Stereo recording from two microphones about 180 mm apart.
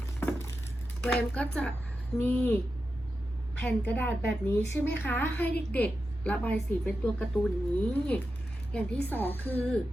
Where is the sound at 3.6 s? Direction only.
10° left (ahead or behind).